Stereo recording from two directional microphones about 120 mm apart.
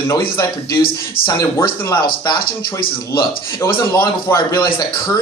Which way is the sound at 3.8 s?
25° left (ahead or behind).